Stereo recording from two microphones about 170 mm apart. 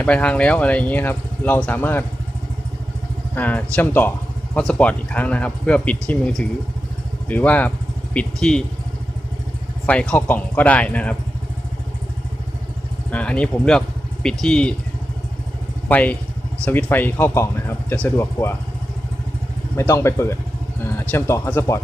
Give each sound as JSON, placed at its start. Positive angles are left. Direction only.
{"t": 0.0, "sound": "speech", "side_deg": 5}
{"t": 3.3, "sound": "speech", "side_deg": 10}
{"t": 9.8, "sound": "speech", "side_deg": 5}
{"t": 13.1, "sound": "speech", "side_deg": 10}
{"t": 15.9, "sound": "speech", "side_deg": 10}
{"t": 19.7, "sound": "speech", "side_deg": 15}